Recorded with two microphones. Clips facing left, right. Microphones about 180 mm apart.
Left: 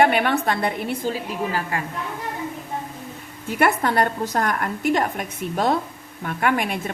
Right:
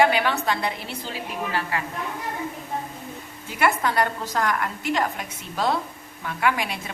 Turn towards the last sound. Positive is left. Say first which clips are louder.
# left 3 dB
turn(degrees=50)  # may be behind; listen again after turning